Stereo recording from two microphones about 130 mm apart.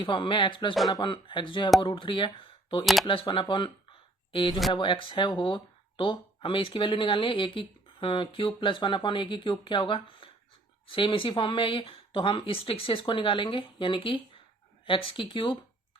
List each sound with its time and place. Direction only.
0.0 s speech: 40° left (ahead or behind)
2.8 s speech: centre (ahead or behind)
3.1 s speech: 40° left (ahead or behind)